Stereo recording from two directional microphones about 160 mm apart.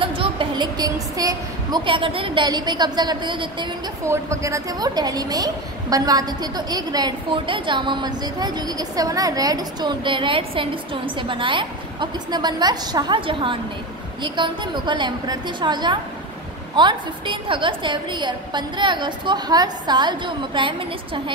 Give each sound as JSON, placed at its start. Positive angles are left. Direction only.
{"t": 0.0, "sound": "a woman's voice", "side_deg": -30}
{"t": 4.0, "sound": "a woman's voice", "side_deg": -20}